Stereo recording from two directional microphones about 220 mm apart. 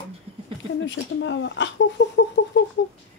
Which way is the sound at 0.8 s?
55° left (ahead or behind).